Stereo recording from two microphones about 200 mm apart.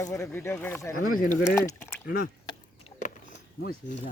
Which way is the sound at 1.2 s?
40° left (ahead or behind).